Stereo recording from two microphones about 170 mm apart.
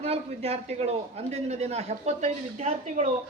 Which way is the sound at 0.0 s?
35° right (ahead or behind).